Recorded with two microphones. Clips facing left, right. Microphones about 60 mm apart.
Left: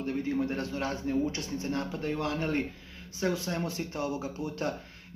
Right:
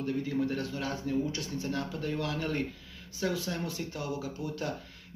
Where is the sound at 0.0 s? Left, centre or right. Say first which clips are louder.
Left 1 dB; left.